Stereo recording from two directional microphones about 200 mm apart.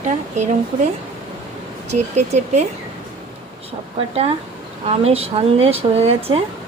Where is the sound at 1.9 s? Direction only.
35° right (ahead or behind).